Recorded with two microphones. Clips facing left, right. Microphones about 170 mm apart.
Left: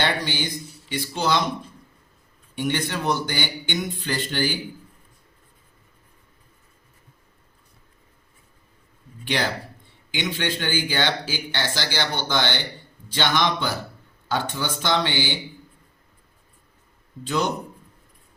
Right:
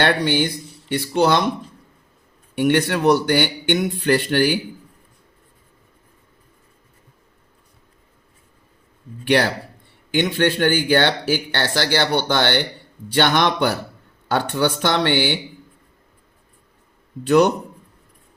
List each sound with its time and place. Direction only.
0.0 s speech: 60° right (ahead or behind)
2.6 s speech: 65° right (ahead or behind)
9.2 s speech: 60° right (ahead or behind)
17.2 s speech: 60° right (ahead or behind)